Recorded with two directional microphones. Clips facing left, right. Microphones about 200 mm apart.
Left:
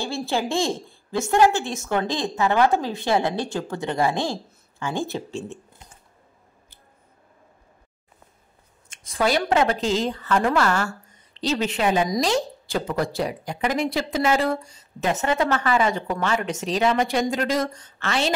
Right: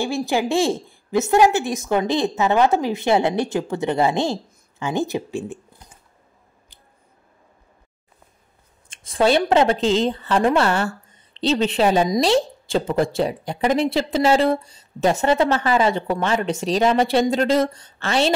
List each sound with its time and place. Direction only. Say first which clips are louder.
0.0 s a woman's voice: right 4 dB; 15° right (ahead or behind)
8.9 s a woman's voice: right 5 dB; 30° right (ahead or behind)